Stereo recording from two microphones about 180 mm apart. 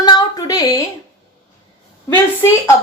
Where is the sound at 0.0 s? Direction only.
20° left (ahead or behind).